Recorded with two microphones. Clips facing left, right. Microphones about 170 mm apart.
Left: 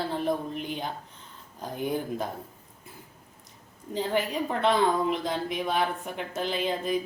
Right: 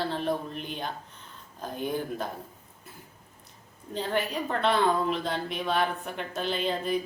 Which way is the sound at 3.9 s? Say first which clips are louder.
Left 2 dB; 15° left (ahead or behind).